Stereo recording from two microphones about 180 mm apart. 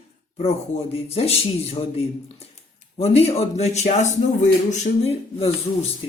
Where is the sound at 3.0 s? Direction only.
35° left (ahead or behind).